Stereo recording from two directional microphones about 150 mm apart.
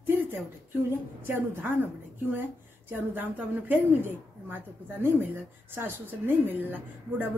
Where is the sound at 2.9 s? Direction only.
10° right (ahead or behind).